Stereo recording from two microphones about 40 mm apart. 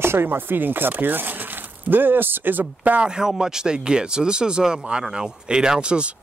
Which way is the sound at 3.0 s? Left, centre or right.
Centre.